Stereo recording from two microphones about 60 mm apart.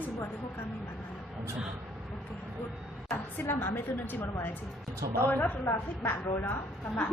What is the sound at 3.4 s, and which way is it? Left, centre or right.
Speech, left.